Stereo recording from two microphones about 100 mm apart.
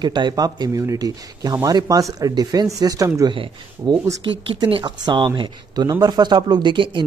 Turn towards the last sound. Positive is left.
turn(degrees=-55)  # may be behind; listen again after turning